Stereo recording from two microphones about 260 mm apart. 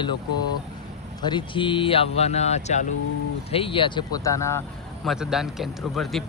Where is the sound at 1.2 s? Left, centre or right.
Centre.